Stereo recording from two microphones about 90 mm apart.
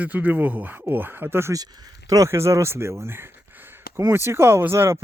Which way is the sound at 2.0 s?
40° right (ahead or behind).